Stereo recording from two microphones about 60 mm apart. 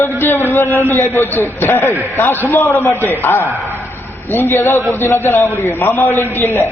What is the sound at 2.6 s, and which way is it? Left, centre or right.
Speech, left.